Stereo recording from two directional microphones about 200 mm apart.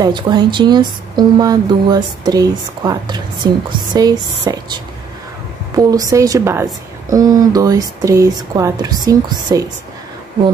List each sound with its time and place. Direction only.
0.0 s speech: 20° right (ahead or behind)
5.8 s a woman's voice: 20° right (ahead or behind)